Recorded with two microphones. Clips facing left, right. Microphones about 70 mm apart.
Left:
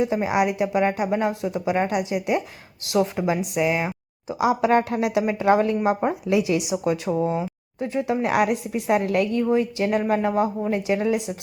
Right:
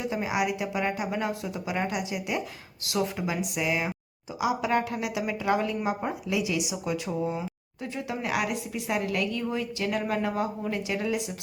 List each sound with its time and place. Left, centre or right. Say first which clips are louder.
0.0 s speech: left 7 dB; left